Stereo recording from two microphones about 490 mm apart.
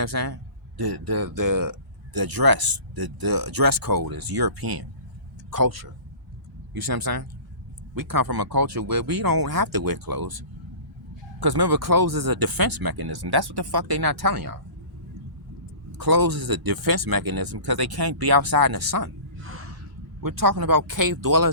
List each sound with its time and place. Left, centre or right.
0.0 s speech: right
11.3 s speech: right
16.0 s speech: right
19.4 s gasp: right
20.2 s speech: right